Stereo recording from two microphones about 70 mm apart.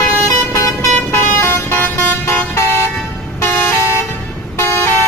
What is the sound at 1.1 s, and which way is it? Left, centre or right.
Vehicle, left.